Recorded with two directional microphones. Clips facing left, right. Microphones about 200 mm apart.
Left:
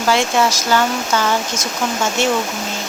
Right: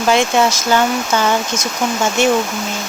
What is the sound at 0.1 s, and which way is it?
Speech, 20° right (ahead or behind).